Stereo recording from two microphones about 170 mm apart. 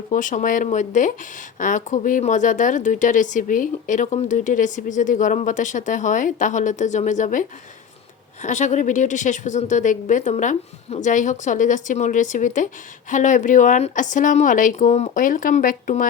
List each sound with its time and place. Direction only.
0.1 s speech: 50° left (ahead or behind)